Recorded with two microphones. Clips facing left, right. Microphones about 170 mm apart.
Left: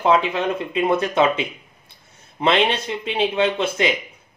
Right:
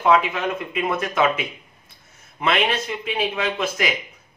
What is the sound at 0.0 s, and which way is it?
Speech, 30° left (ahead or behind).